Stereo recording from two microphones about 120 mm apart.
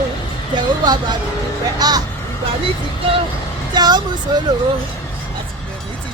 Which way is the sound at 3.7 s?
35° right (ahead or behind).